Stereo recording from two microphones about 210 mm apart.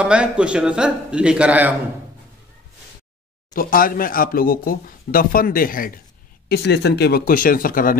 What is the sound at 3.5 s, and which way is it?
Speech, 40° left (ahead or behind).